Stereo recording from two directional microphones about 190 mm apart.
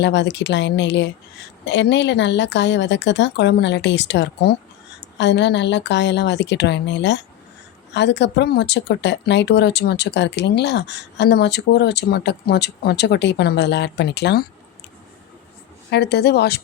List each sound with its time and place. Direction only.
0.0 s speech: 65° left (ahead or behind)
15.9 s speech: 60° left (ahead or behind)